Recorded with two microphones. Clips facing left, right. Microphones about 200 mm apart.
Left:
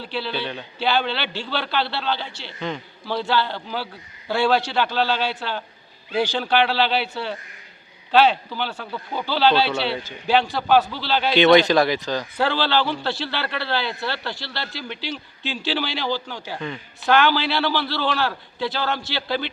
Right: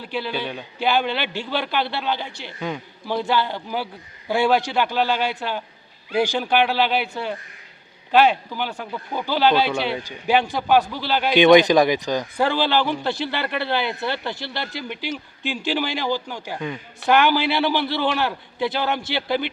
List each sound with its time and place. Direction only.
0.0 s a man's voice: 15° right (ahead or behind)
8.1 s a man's voice: 10° right (ahead or behind)